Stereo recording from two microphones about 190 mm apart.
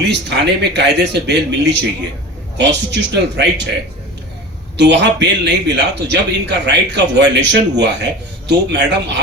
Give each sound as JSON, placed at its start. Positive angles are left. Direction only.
{"t": 0.1, "sound": "a man's voice", "side_deg": -65}
{"t": 4.8, "sound": "a man's voice", "side_deg": -65}